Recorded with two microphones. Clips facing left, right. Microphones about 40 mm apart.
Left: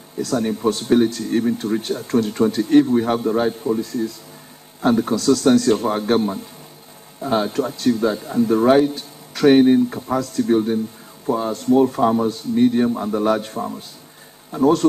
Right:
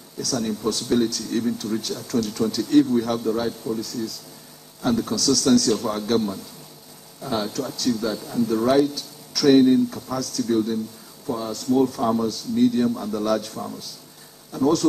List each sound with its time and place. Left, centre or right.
0.2 s speech: left